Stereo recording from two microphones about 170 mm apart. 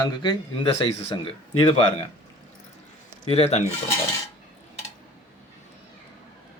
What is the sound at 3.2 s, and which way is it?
Speech, 35° left (ahead or behind).